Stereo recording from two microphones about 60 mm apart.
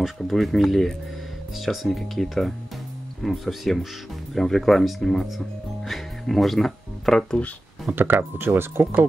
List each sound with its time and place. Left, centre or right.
0.0 s speech: centre
7.9 s speech: right